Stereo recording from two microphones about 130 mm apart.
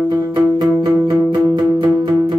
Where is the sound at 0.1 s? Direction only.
35° right (ahead or behind).